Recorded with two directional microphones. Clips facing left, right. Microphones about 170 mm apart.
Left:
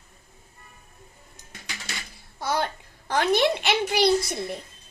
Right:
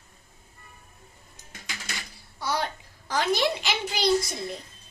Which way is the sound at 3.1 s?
55° left (ahead or behind).